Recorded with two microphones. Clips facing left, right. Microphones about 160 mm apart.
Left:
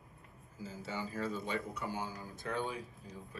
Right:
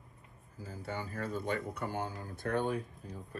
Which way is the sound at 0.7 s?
55° right (ahead or behind).